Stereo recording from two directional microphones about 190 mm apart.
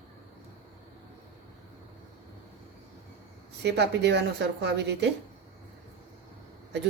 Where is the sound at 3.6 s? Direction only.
65° right (ahead or behind).